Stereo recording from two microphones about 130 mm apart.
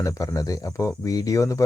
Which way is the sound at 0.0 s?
25° left (ahead or behind).